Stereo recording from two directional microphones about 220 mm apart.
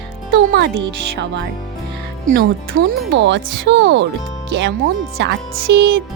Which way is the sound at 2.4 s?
55° right (ahead or behind).